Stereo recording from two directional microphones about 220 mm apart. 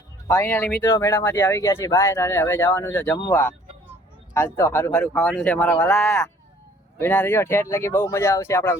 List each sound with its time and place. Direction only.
0.3 s speech: 10° left (ahead or behind)
4.4 s speech: 10° left (ahead or behind)